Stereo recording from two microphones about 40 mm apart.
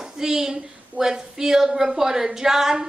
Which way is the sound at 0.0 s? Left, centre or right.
Centre.